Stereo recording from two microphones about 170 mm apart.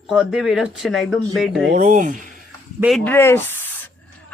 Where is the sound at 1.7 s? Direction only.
50° right (ahead or behind).